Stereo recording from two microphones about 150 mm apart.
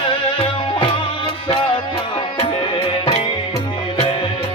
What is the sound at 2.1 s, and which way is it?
Music, 40° left (ahead or behind).